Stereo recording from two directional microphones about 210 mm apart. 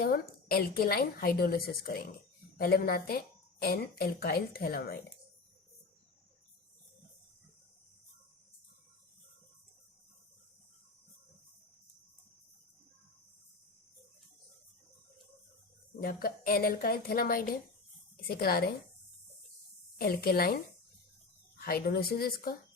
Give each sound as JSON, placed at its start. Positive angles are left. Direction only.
{"t": 0.0, "sound": "a woman's voice", "side_deg": 45}
{"t": 16.0, "sound": "a woman's voice", "side_deg": 45}
{"t": 20.0, "sound": "a woman's voice", "side_deg": 45}
{"t": 21.6, "sound": "a woman's voice", "side_deg": 45}